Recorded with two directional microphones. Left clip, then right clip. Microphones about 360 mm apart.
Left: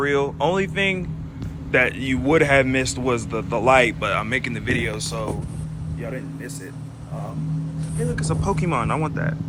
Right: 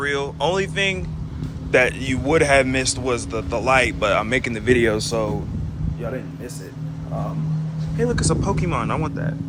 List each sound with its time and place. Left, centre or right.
0.0 s speech: centre
4.9 s speech: right
8.1 s speech: centre